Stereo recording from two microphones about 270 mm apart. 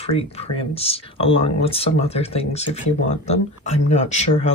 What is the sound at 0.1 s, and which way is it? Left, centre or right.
Speech, left.